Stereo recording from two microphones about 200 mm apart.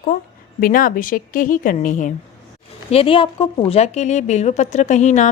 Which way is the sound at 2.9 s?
30° left (ahead or behind).